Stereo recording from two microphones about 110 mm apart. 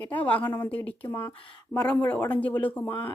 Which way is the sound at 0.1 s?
15° left (ahead or behind).